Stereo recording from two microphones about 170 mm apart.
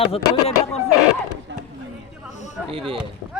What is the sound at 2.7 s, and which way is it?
Speech, 30° right (ahead or behind).